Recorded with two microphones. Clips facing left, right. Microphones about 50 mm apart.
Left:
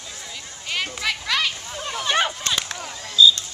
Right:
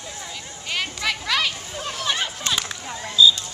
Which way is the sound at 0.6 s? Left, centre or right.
Centre.